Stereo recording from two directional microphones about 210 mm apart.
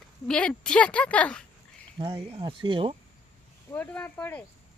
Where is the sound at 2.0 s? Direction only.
25° right (ahead or behind).